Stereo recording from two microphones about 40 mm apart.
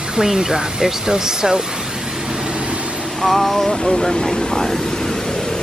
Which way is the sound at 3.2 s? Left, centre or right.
Centre.